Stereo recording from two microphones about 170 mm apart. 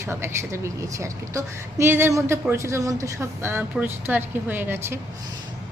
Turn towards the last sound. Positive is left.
turn(degrees=-15)  # may be behind; listen again after turning